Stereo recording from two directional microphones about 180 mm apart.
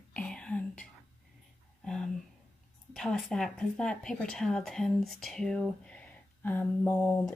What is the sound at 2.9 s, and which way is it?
Speech, centre (ahead or behind).